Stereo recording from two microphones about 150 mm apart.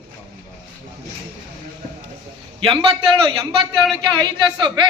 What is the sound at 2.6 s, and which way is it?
A man's voice, 35° right (ahead or behind).